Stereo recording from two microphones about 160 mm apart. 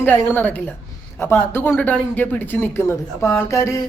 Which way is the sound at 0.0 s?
10° left (ahead or behind).